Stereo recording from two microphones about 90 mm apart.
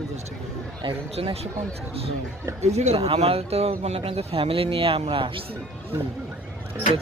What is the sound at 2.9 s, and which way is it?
Speech, 90° right.